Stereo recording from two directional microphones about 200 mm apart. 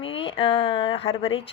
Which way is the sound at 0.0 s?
25° left (ahead or behind).